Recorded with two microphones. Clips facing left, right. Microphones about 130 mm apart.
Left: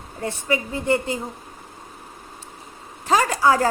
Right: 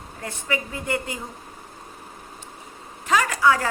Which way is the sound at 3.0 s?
30° left (ahead or behind).